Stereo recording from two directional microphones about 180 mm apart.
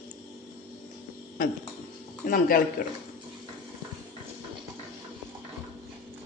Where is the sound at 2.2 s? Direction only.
50° left (ahead or behind).